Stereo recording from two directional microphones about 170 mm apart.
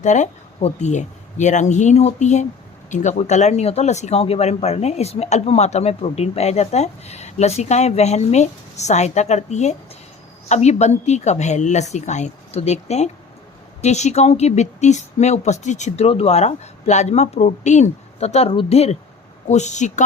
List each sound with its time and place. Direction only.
0.0 s speech: 45° left (ahead or behind)